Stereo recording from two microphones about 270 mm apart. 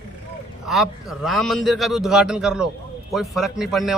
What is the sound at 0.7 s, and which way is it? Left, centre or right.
A man's voice, centre.